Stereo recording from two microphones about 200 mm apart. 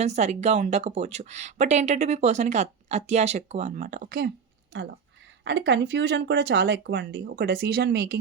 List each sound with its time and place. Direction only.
0.0 s speech: 35° right (ahead or behind)
5.4 s speech: 60° right (ahead or behind)